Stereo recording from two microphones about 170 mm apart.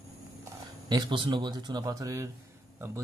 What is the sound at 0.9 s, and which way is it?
Speech, 25° right (ahead or behind).